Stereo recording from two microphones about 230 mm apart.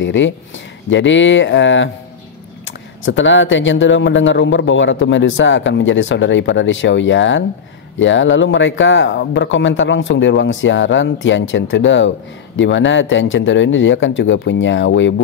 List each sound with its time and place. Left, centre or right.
0.0 s speech: left
3.1 s speech: left